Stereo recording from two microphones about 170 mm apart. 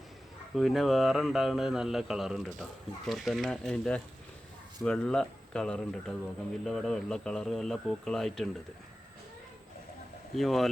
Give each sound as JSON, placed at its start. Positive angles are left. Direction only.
{"t": 0.5, "sound": "speech", "side_deg": 0}
{"t": 10.3, "sound": "speech", "side_deg": 0}